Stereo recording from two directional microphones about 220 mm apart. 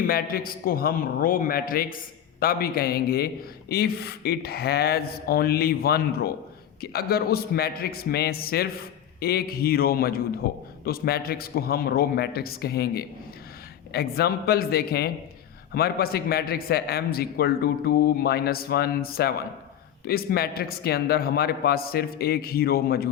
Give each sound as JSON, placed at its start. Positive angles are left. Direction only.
{"t": 0.1, "sound": "a man's voice", "side_deg": 40}